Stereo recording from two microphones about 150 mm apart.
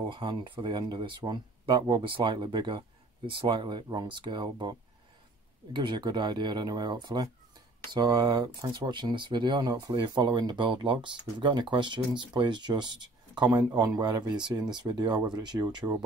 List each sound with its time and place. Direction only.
0.1 s speech: 35° right (ahead or behind)